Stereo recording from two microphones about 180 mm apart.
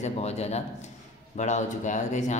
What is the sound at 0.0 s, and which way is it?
Speech, 35° left (ahead or behind).